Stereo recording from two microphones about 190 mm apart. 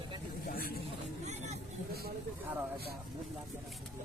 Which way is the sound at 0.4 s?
50° left (ahead or behind).